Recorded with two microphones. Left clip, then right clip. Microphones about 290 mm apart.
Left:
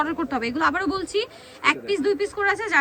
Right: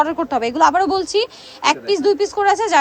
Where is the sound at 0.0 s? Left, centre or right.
Centre.